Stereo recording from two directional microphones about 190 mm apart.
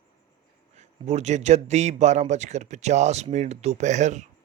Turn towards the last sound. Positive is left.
turn(degrees=-40)  # may be behind; listen again after turning